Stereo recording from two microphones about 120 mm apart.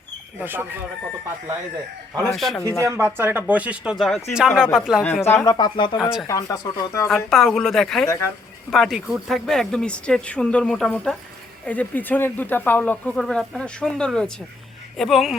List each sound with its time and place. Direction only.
0.3 s speech: 15° right (ahead or behind)
2.1 s speech: centre (ahead or behind)
2.6 s speech: 25° left (ahead or behind)
2.9 s speech: 20° right (ahead or behind)
5.2 s speech: 20° left (ahead or behind)
5.5 s speech: 40° left (ahead or behind)
6.0 s speech: 5° right (ahead or behind)
6.2 s speech: 25° left (ahead or behind)
7.3 s speech: centre (ahead or behind)